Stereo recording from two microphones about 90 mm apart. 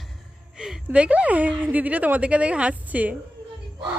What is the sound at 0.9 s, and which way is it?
Speech, 15° right (ahead or behind).